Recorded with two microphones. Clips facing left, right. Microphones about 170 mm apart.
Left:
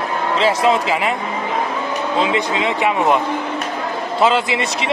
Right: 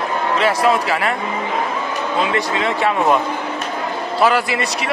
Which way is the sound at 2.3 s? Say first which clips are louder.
Left 1 dB; 15° left (ahead or behind).